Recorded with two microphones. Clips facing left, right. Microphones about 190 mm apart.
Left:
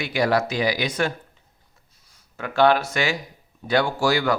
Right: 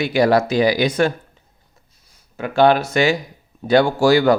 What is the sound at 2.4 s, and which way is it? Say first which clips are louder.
Speech: right 4 dB; 20° right (ahead or behind).